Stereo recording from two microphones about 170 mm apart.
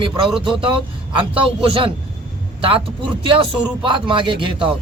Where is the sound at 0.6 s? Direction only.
30° right (ahead or behind).